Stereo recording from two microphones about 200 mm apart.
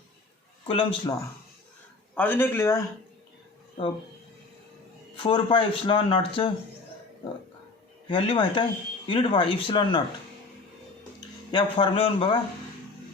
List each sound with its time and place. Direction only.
0.7 s speech: 25° left (ahead or behind)
2.1 s speech: 10° left (ahead or behind)
5.1 s speech: 25° left (ahead or behind)
8.0 s speech: 25° left (ahead or behind)
11.5 s speech: 25° left (ahead or behind)